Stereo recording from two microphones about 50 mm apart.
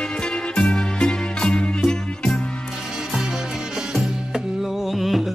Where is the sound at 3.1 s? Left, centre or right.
Centre.